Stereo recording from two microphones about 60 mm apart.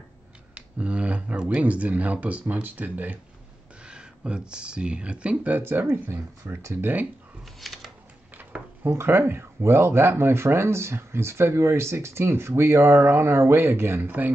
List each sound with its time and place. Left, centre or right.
0.6 s speech: right
3.8 s speech: centre
5.6 s speech: right
7.4 s scissors: centre
8.4 s a sound: right
8.9 s speech: right